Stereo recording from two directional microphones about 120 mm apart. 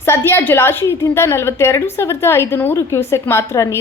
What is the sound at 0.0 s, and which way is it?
A woman's voice, 20° left (ahead or behind).